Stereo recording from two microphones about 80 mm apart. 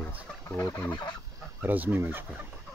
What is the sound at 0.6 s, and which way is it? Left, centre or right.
Chicken, left.